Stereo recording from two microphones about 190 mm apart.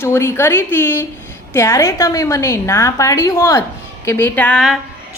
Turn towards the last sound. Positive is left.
turn(degrees=0)  # may be behind; listen again after turning